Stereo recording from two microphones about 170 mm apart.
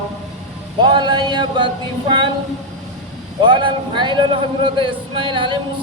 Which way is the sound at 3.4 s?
30° right (ahead or behind).